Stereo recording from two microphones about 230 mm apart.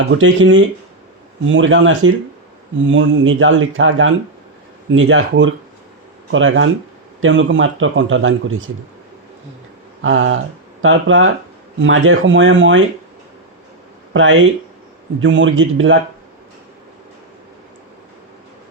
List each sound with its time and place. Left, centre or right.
0.2 s a man's voice: right
10.0 s a man's voice: right
14.1 s a man's voice: right